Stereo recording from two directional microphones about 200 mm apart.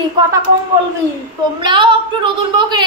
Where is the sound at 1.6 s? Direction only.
25° right (ahead or behind).